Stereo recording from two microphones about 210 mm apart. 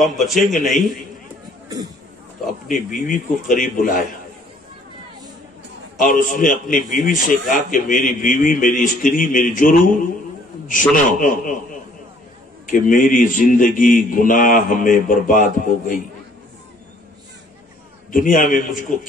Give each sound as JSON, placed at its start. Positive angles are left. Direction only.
{"t": 0.0, "sound": "a man's voice", "side_deg": 0}
{"t": 2.7, "sound": "a man's voice", "side_deg": 40}
{"t": 5.9, "sound": "a man's voice", "side_deg": 40}
{"t": 12.6, "sound": "a man's voice", "side_deg": 40}
{"t": 18.1, "sound": "a man's voice", "side_deg": 40}